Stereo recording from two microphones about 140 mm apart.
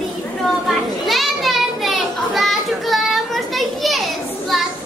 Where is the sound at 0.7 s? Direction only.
Centre (ahead or behind).